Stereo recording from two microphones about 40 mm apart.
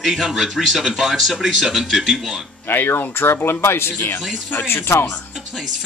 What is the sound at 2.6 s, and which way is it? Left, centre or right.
Speech, left.